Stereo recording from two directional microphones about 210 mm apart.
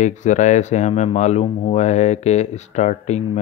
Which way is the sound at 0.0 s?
35° left (ahead or behind).